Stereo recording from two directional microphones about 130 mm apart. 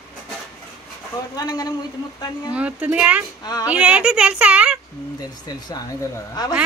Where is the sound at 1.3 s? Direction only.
30° left (ahead or behind).